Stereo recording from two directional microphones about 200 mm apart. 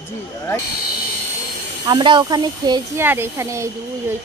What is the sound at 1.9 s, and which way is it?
Speech, 20° right (ahead or behind).